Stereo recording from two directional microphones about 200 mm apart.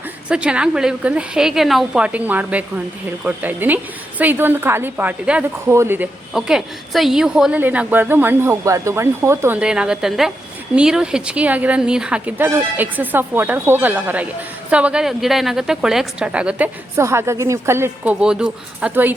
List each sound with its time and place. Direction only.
0.3 s a woman's voice: 5° right (ahead or behind)